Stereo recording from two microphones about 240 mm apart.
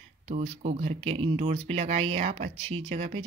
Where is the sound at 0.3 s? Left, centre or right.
Right.